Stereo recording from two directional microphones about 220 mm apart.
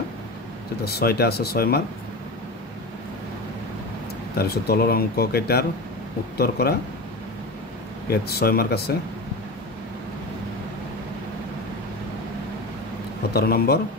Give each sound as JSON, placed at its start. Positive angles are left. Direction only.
{"t": 0.8, "sound": "speech", "side_deg": 45}
{"t": 4.4, "sound": "speech", "side_deg": 45}
{"t": 8.1, "sound": "speech", "side_deg": 45}
{"t": 13.3, "sound": "speech", "side_deg": 45}